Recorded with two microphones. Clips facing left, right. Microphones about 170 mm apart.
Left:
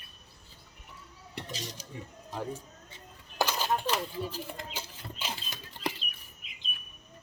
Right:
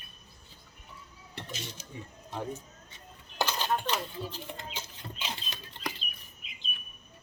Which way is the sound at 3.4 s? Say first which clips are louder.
Left 1 dB; 10° left (ahead or behind).